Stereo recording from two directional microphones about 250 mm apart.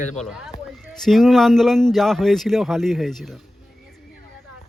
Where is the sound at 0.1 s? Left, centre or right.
Centre.